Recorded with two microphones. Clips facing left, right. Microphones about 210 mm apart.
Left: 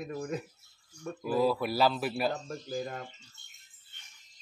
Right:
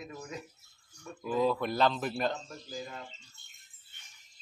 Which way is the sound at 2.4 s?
55° left (ahead or behind).